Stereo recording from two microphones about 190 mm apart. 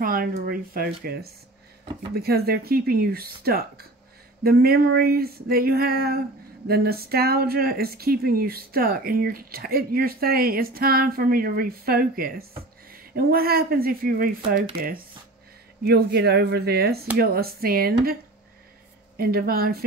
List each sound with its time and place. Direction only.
0.0 s speech: 50° right (ahead or behind)
19.1 s speech: 50° right (ahead or behind)